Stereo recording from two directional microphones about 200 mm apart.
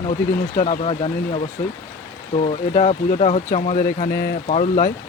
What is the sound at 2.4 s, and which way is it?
Speech, 35° left (ahead or behind).